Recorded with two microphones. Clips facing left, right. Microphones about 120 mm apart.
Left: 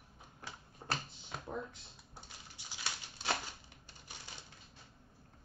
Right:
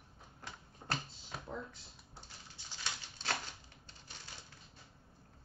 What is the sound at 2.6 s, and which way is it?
Patter, 10° left (ahead or behind).